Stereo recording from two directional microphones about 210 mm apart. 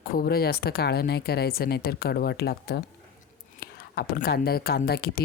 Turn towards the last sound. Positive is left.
turn(degrees=50)  # may be behind; listen again after turning